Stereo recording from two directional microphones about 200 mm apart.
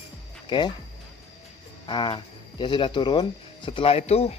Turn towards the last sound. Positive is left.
turn(degrees=30)  # may be behind; listen again after turning